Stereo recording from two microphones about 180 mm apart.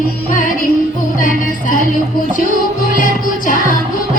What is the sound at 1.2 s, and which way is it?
Music, 45° left (ahead or behind).